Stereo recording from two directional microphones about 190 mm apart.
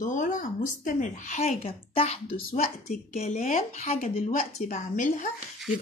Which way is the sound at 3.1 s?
35° left (ahead or behind).